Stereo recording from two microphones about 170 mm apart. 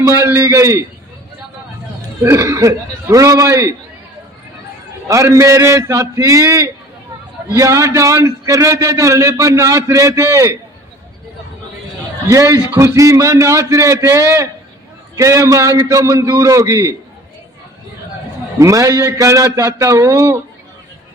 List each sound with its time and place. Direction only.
0.0 s a man's voice: 15° right (ahead or behind)
2.2 s a man's voice: 15° right (ahead or behind)
5.0 s a man's voice: 15° right (ahead or behind)
12.3 s a man's voice: 15° right (ahead or behind)
18.6 s a man's voice: 20° right (ahead or behind)